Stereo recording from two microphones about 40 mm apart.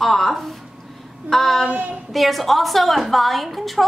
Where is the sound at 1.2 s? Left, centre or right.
Centre.